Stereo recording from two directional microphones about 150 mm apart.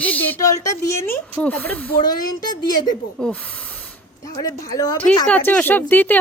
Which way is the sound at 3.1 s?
5° left (ahead or behind).